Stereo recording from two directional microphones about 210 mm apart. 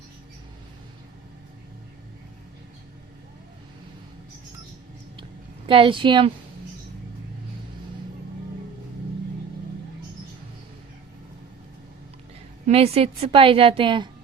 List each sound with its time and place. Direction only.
5.6 s a woman's voice: 25° right (ahead or behind)
12.6 s a woman's voice: 30° right (ahead or behind)